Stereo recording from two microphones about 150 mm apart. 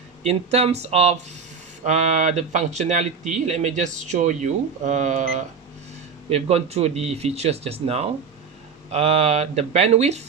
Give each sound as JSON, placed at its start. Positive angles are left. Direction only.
{"t": 0.3, "sound": "speech", "side_deg": -45}